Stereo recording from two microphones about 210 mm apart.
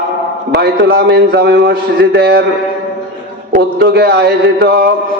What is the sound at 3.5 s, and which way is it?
A man's voice, 50° right (ahead or behind).